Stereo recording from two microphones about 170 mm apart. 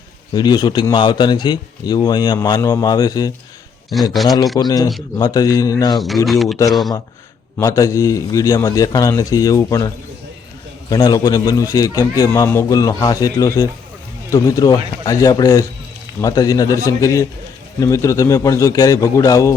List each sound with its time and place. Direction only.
0.3 s a man's voice: 25° left (ahead or behind)
4.2 s speech: centre (ahead or behind)
4.5 s a man's voice: 25° left (ahead or behind)
6.2 s speech: centre (ahead or behind)
7.6 s a man's voice: 20° left (ahead or behind)